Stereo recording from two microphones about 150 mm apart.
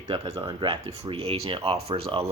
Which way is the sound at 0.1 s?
35° right (ahead or behind).